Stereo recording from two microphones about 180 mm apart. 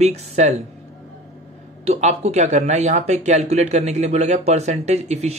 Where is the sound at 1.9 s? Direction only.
35° right (ahead or behind).